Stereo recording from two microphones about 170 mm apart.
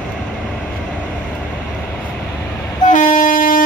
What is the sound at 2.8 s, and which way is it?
Train, 50° left (ahead or behind).